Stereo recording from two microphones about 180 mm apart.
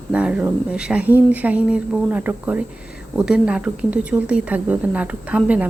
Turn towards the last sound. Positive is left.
turn(degrees=-5)  # may be behind; listen again after turning